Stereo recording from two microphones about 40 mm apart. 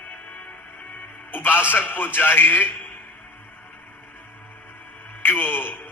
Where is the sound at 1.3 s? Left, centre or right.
Left.